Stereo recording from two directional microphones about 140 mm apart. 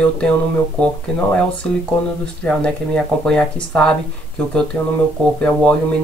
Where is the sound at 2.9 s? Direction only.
5° left (ahead or behind).